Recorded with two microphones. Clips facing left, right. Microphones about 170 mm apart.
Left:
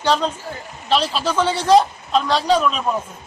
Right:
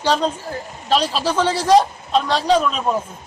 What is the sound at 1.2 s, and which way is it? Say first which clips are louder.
A man's voice: right 1 dB; 30° right (ahead or behind).